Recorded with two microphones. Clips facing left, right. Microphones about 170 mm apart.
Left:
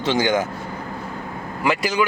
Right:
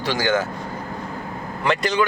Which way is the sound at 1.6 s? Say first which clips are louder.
Even; 5° left (ahead or behind).